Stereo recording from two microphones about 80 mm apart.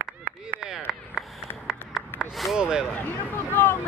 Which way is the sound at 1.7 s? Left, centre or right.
Centre.